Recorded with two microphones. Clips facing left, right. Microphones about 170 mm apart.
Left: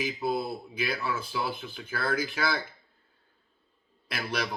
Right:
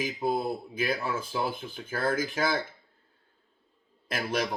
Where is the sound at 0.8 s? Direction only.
45° right (ahead or behind).